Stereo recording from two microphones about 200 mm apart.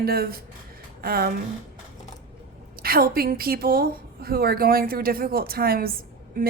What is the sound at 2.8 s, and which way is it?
Speech, 50° right (ahead or behind).